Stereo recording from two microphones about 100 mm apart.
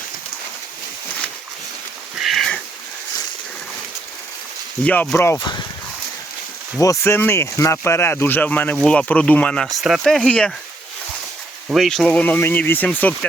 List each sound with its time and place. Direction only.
2.1 s sniff: centre (ahead or behind)
4.8 s speech: 15° left (ahead or behind)
5.1 s speech: 25° left (ahead or behind)
5.4 s speech: 50° left (ahead or behind)
6.7 s speech: 30° left (ahead or behind); by 10.5 s 10° left (ahead or behind)
11.7 s speech: centre (ahead or behind)
12.0 s speech: 15° left (ahead or behind)